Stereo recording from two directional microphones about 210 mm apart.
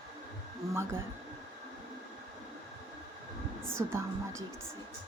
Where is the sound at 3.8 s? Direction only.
15° right (ahead or behind).